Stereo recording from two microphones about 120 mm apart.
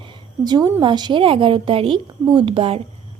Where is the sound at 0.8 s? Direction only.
40° right (ahead or behind).